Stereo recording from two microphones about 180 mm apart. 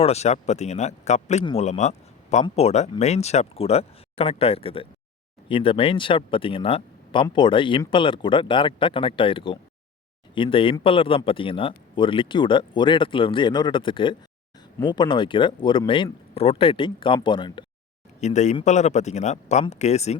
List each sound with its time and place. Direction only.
0.0 s speech: 35° left (ahead or behind)
18.2 s speech: 40° left (ahead or behind)